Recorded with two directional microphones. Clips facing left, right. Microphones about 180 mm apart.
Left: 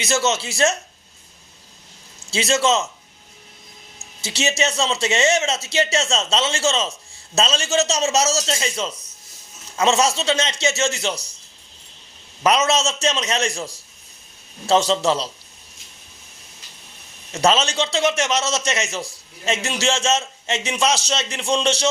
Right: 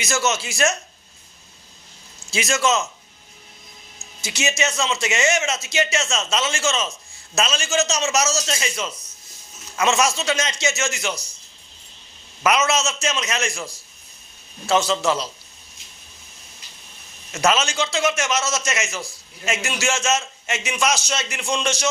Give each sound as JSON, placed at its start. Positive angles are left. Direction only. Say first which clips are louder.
{"t": 0.0, "sound": "speech", "louder": "left 2 dB", "side_deg": 30}
{"t": 2.3, "sound": "speech", "louder": "left 2 dB", "side_deg": 30}
{"t": 4.2, "sound": "a man's voice", "louder": "left 2 dB", "side_deg": 30}
{"t": 12.4, "sound": "a man's voice", "louder": "left 2 dB", "side_deg": 35}
{"t": 17.3, "sound": "a man's voice", "louder": "left 2 dB", "side_deg": 30}